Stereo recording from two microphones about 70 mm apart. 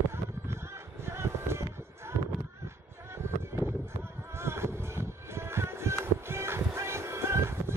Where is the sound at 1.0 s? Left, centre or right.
Right.